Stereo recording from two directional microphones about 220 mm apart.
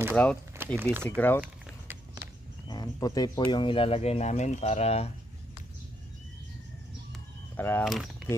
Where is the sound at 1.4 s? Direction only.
10° right (ahead or behind).